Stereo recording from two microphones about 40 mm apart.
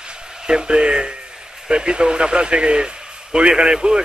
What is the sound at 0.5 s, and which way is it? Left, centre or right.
Speech, centre.